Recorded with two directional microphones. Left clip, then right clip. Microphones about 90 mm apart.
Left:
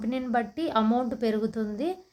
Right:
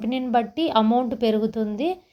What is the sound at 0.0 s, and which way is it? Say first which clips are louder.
A woman's voice: right 6 dB; 30° right (ahead or behind).